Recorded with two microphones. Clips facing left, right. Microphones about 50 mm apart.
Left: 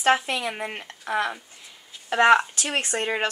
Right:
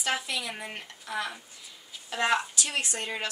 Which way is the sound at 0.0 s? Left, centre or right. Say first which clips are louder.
Left 9 dB; left.